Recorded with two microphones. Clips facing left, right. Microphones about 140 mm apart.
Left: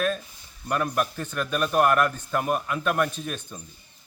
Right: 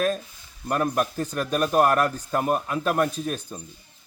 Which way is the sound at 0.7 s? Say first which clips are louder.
Right 2 dB; 35° right (ahead or behind).